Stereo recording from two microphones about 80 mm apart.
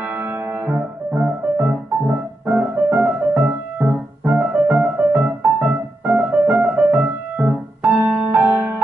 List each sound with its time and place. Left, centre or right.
0.1 s music: right